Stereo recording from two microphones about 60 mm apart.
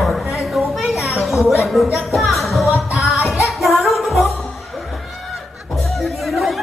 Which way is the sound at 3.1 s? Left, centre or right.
Left.